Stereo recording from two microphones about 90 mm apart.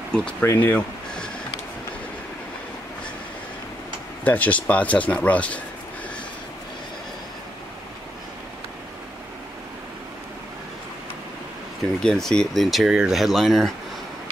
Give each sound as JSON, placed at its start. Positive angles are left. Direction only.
{"t": 0.1, "sound": "speech", "side_deg": 10}
{"t": 4.2, "sound": "speech", "side_deg": 15}
{"t": 12.0, "sound": "speech", "side_deg": 5}